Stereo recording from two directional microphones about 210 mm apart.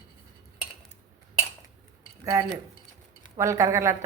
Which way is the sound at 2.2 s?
15° right (ahead or behind).